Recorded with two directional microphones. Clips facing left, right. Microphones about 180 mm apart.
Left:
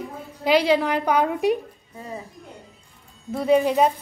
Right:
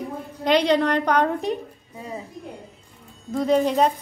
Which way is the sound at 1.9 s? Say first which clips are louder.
Right 1 dB; 15° right (ahead or behind).